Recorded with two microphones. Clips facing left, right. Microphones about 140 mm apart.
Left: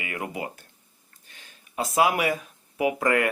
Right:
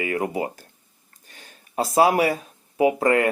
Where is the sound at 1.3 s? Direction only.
40° right (ahead or behind).